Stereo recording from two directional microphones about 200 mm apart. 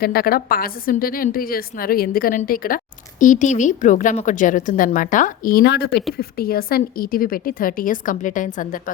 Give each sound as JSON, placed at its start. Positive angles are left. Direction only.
{"t": 0.0, "sound": "a woman's voice", "side_deg": 50}